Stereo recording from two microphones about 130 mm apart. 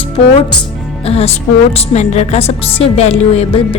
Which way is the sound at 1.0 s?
50° left (ahead or behind).